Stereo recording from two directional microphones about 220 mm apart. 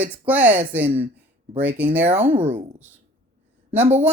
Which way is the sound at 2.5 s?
30° right (ahead or behind).